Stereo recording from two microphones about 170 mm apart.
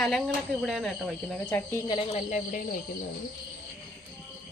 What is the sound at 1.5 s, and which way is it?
Speech, 15° left (ahead or behind).